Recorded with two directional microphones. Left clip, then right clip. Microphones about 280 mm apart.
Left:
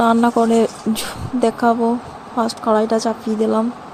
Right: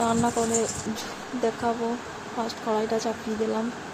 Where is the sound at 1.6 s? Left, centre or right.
Left.